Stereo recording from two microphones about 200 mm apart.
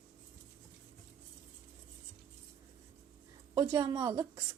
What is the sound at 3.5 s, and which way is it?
Speech, 20° right (ahead or behind).